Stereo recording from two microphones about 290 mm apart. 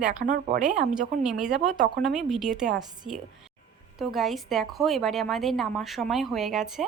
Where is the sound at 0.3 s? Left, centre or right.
Right.